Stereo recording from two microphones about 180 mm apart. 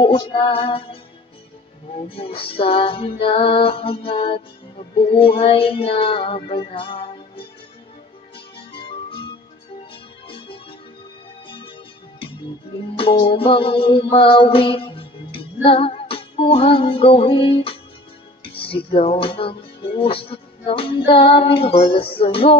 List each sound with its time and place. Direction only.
0.0 s music: 30° left (ahead or behind)
2.0 s music: 30° left (ahead or behind)
8.7 s music: 30° left (ahead or behind)
12.9 s music: 30° left (ahead or behind)